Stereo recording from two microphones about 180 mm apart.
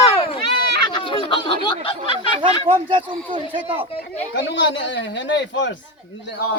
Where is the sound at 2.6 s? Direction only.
30° right (ahead or behind).